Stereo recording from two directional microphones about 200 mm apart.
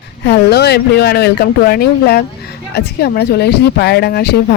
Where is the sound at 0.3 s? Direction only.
55° left (ahead or behind).